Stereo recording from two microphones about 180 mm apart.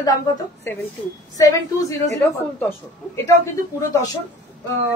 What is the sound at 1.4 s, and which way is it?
Speech, 15° left (ahead or behind).